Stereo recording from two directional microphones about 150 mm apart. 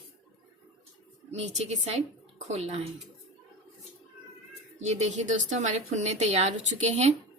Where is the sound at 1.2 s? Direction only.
45° right (ahead or behind).